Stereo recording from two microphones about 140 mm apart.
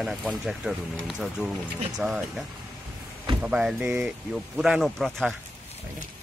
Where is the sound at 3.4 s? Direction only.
5° right (ahead or behind).